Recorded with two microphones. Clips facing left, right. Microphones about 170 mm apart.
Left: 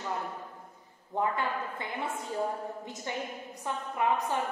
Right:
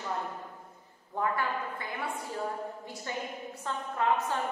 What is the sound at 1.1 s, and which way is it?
A woman's voice, 20° left (ahead or behind).